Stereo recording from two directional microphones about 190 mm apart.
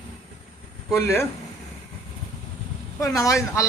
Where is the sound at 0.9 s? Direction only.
10° left (ahead or behind).